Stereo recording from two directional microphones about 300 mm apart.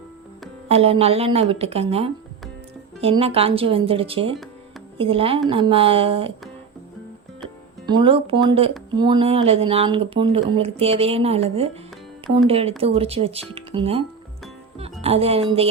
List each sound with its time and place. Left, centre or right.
0.7 s a woman's voice: centre
7.9 s a woman's voice: centre
15.0 s a woman's voice: centre